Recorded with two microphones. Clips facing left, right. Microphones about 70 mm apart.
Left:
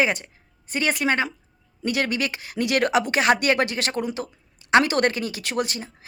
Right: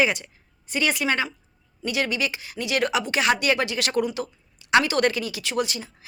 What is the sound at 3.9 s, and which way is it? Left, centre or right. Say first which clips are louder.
Speech: right 2 dB; left.